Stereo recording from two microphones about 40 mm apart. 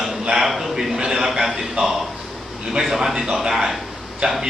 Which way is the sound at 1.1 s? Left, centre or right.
Centre.